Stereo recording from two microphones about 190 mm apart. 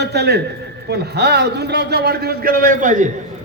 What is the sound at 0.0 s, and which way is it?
A man's voice, 60° right (ahead or behind).